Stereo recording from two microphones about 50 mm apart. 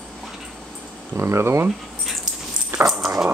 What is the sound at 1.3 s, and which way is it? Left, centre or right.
Speech, right.